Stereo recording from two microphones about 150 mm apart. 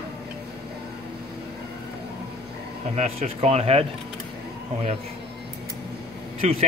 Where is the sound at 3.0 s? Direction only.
45° right (ahead or behind).